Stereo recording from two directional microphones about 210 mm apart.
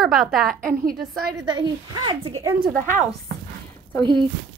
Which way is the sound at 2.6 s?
40° right (ahead or behind).